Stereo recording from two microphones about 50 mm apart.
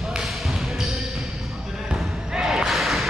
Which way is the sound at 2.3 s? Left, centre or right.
Centre.